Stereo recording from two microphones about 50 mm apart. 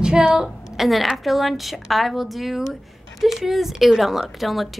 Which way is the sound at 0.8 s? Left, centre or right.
Centre.